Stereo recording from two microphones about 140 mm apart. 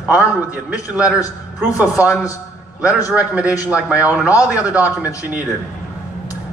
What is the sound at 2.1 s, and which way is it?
Speech, 25° left (ahead or behind).